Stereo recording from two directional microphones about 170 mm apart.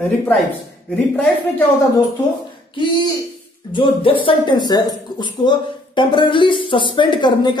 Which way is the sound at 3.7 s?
30° left (ahead or behind).